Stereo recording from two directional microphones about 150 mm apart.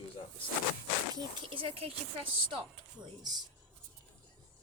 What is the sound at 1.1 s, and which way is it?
Speech, 35° right (ahead or behind).